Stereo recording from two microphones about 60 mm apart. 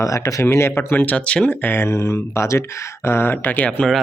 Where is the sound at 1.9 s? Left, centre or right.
Left.